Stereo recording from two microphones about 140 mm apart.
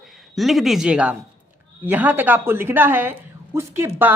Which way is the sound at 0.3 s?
Centre (ahead or behind).